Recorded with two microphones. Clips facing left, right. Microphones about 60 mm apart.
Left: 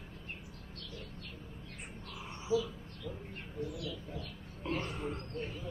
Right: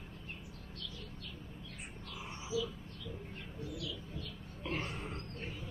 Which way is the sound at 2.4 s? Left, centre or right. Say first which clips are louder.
Left 5 dB; left.